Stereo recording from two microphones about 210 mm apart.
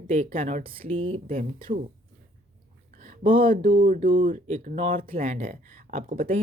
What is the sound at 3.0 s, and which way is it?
Speech, 40° right (ahead or behind).